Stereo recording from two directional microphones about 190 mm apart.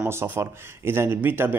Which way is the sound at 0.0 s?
10° right (ahead or behind).